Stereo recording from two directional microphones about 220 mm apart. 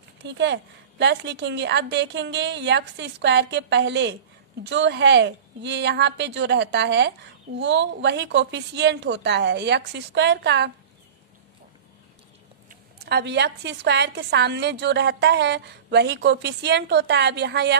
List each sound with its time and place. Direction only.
0.3 s a woman's voice: 50° right (ahead or behind)
12.6 s a woman's voice: 45° right (ahead or behind)